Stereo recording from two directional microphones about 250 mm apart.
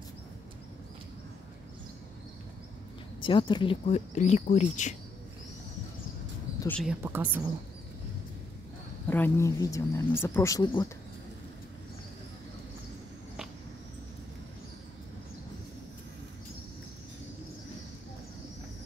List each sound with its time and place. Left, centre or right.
3.2 s speech: centre
6.6 s speech: centre
9.1 s speech: centre